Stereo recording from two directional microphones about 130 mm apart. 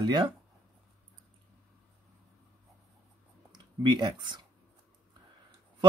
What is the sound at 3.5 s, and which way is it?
Speech, 35° right (ahead or behind).